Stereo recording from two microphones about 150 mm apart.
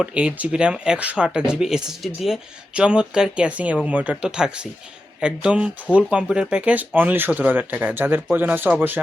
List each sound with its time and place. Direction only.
0.0 s speech: 5° right (ahead or behind)